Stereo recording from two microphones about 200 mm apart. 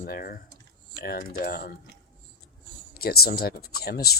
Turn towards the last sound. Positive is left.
turn(degrees=50)  # may be behind; listen again after turning